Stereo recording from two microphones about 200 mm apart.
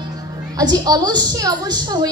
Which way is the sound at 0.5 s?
20° right (ahead or behind).